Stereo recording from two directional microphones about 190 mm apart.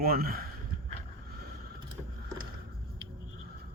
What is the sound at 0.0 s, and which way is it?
Speech, 50° right (ahead or behind).